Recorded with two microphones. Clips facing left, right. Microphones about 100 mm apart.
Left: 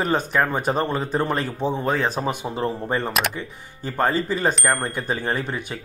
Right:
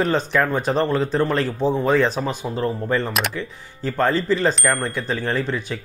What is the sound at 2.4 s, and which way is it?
Speech, 20° left (ahead or behind).